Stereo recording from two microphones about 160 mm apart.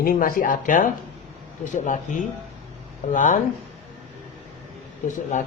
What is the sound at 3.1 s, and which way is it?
Speech, 50° left (ahead or behind).